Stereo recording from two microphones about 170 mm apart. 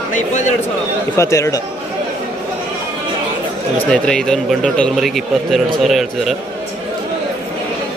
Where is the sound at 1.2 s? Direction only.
20° left (ahead or behind).